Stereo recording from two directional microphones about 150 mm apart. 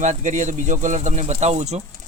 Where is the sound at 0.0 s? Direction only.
55° right (ahead or behind).